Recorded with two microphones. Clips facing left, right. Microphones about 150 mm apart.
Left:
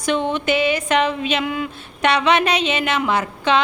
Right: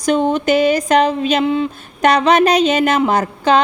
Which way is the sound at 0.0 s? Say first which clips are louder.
Right 5 dB; 40° right (ahead or behind).